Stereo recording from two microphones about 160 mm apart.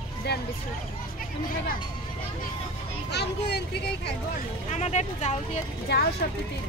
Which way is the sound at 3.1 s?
90° left.